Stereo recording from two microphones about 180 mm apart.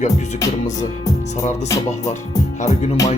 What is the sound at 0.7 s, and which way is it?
Speech, 20° left (ahead or behind).